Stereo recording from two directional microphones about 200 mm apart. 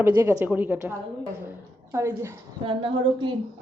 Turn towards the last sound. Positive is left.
turn(degrees=-25)  # may be behind; listen again after turning